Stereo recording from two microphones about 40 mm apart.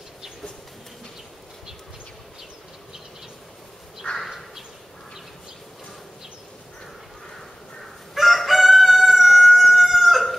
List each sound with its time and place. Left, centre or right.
8.1 s chicken: centre